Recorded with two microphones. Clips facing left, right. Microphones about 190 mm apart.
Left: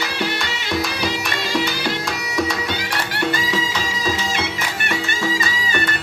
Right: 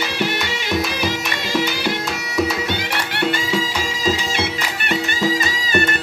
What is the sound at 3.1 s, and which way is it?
Music, 25° right (ahead or behind).